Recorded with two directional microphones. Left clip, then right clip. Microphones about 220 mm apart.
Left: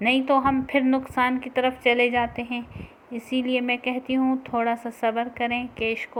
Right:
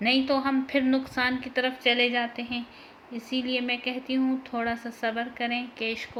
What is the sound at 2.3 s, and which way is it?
Speech, 50° left (ahead or behind).